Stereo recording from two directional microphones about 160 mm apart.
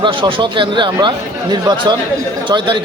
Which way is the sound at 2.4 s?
30° right (ahead or behind).